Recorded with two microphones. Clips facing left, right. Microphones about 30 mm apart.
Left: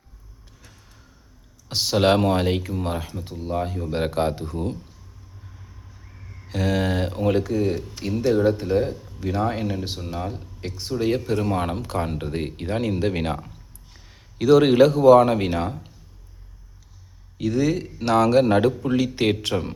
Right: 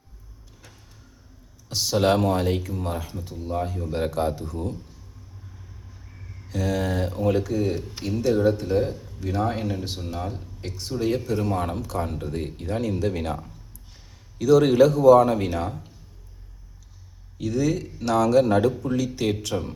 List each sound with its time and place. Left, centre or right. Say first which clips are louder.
1.7 s speech: left 2 dB; left
3.9 s speech: left 2 dB; left
6.1 s a sound: even; centre
6.5 s speech: left 2 dB; left
8.8 s speech: left 1 dB; centre
11.7 s speech: left 2 dB; left
17.3 s speech: left 2 dB; left